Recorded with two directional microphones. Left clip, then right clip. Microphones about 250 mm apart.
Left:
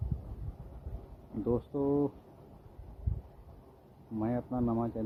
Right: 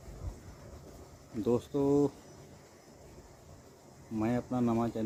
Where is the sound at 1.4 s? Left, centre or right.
Centre.